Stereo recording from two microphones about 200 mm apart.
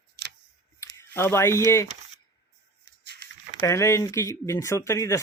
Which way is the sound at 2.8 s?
55° right (ahead or behind).